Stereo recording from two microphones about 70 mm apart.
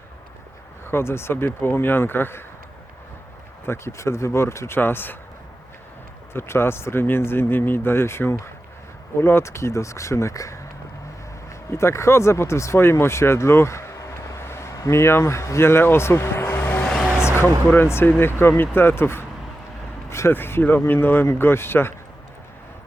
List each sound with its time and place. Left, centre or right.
0.9 s speech: left
3.7 s speech: left
6.3 s speech: left
11.7 s speech: left
17.2 s music: left
17.8 s speech: left